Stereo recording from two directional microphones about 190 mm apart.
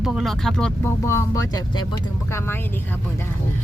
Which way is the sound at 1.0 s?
15° left (ahead or behind).